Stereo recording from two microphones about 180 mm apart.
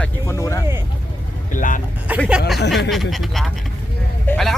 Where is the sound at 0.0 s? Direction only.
15° left (ahead or behind).